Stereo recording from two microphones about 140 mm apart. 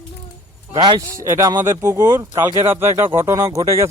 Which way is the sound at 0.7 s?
30° right (ahead or behind).